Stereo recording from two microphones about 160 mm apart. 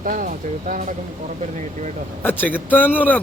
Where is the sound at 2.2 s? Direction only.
10° left (ahead or behind).